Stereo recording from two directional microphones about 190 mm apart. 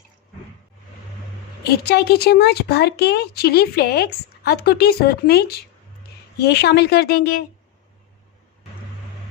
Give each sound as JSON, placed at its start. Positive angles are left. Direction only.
{"t": 1.6, "sound": "speech", "side_deg": 60}